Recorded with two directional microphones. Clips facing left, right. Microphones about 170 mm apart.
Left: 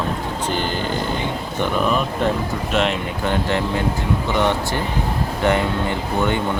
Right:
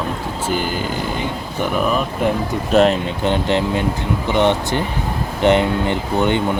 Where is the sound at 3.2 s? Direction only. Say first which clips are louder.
Right 3 dB; 20° right (ahead or behind).